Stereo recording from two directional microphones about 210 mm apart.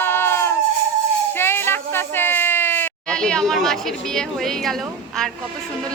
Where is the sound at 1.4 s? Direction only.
10° left (ahead or behind).